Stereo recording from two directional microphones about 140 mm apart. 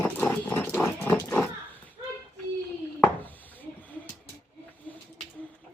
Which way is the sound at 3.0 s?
10° left (ahead or behind).